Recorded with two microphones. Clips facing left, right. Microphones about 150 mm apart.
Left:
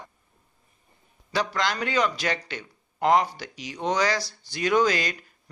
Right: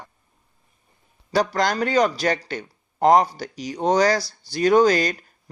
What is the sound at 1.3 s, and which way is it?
Speech, 40° right (ahead or behind).